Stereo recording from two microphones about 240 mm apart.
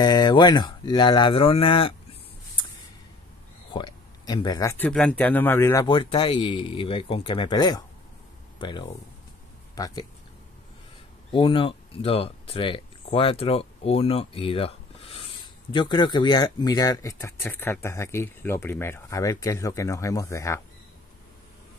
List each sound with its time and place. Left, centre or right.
0.0 s speech: centre
3.7 s speech: centre
11.3 s speech: left